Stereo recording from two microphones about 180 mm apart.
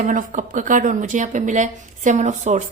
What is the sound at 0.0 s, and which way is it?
A woman's voice, 45° right (ahead or behind).